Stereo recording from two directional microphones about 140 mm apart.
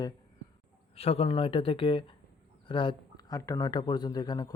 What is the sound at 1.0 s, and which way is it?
Speech, 45° left (ahead or behind).